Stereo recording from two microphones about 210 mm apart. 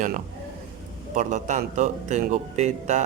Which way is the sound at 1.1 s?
35° right (ahead or behind).